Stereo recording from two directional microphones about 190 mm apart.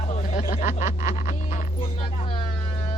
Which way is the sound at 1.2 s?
45° left (ahead or behind).